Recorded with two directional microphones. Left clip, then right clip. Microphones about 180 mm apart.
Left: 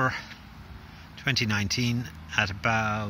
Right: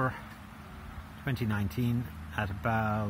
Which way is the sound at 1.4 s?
20° left (ahead or behind).